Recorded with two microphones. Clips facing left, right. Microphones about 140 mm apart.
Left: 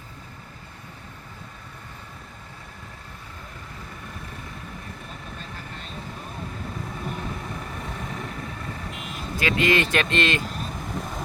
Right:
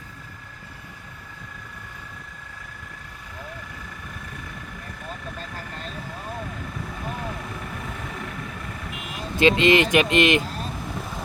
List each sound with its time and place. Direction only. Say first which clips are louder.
9.4 s speech: right 5 dB; 25° right (ahead or behind)